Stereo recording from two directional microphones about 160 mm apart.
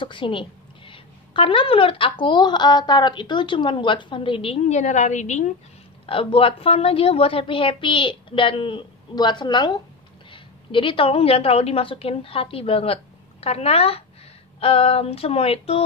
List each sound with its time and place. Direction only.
0.0 s a woman's voice: 30° left (ahead or behind); by 5.5 s 45° left (ahead or behind)
6.0 s a woman's voice: 35° left (ahead or behind)